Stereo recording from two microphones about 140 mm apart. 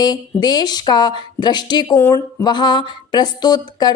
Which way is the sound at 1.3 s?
30° left (ahead or behind).